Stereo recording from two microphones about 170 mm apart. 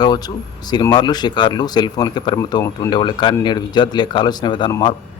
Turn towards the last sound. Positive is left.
turn(degrees=25)  # may be behind; listen again after turning